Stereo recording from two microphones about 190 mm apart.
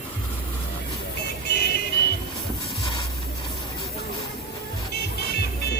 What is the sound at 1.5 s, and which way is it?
Music, 55° left (ahead or behind).